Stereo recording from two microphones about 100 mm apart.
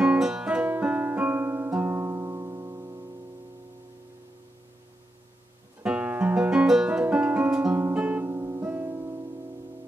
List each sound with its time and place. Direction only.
0.0 s music: 10° right (ahead or behind); by 3.1 s 30° right (ahead or behind)
5.9 s music: 10° right (ahead or behind)
8.3 s music: 30° right (ahead or behind)